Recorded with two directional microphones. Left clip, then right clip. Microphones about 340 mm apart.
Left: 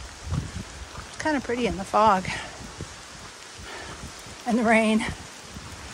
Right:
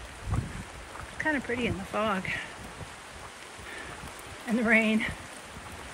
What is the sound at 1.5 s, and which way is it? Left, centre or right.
Speech, centre.